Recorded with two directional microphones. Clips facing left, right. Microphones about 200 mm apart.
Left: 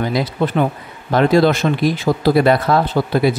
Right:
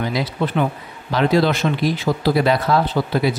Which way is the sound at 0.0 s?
45° left (ahead or behind).